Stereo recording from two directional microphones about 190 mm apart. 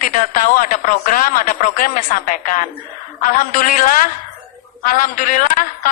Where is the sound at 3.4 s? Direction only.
45° left (ahead or behind).